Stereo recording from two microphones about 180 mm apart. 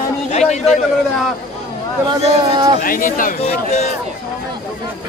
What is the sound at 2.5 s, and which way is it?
Speech, 25° right (ahead or behind).